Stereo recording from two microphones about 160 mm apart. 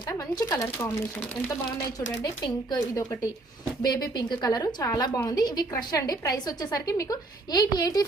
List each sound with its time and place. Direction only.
0.3 s a woman's voice: 20° left (ahead or behind)
2.2 s a woman's voice: 25° left (ahead or behind)